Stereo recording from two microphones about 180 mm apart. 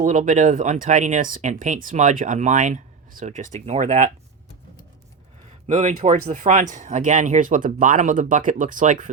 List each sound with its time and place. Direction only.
0.0 s speech: 45° right (ahead or behind)
5.6 s speech: 40° right (ahead or behind)